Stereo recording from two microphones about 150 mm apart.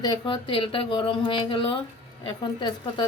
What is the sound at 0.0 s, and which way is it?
Speech, 30° left (ahead or behind).